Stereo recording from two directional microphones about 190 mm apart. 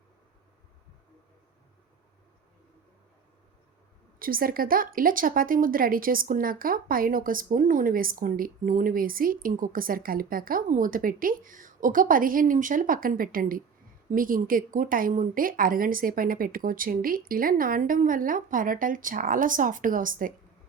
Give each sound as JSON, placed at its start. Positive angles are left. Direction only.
{"t": 4.2, "sound": "speech", "side_deg": -50}